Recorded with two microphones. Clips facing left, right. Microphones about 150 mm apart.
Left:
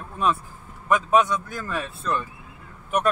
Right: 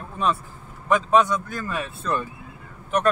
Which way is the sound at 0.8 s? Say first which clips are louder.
Right 1 dB; 5° left (ahead or behind).